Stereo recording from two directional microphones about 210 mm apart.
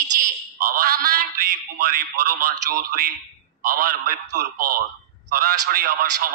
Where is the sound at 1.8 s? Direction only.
45° right (ahead or behind).